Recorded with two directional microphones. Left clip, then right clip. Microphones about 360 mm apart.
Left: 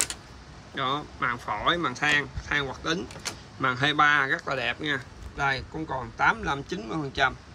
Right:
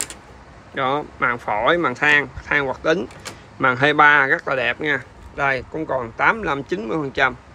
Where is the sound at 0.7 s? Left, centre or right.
Centre.